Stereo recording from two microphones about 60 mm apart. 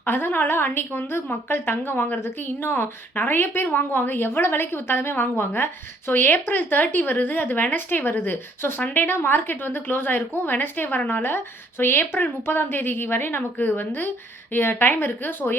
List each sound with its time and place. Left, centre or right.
0.0 s a woman's voice: left